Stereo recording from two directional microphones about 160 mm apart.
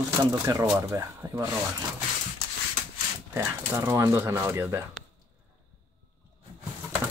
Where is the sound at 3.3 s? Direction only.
15° right (ahead or behind).